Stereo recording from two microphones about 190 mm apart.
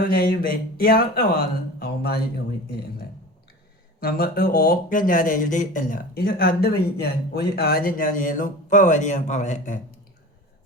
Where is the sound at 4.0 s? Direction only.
50° left (ahead or behind).